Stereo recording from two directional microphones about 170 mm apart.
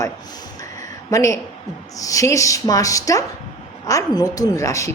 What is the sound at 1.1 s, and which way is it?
A woman's voice, 20° left (ahead or behind).